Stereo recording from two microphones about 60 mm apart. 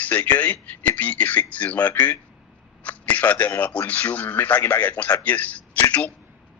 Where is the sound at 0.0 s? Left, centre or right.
Left.